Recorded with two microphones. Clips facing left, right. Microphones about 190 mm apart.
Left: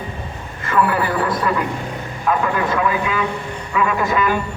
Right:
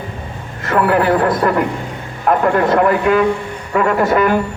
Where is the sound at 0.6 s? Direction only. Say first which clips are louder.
Right 4 dB; 70° right (ahead or behind).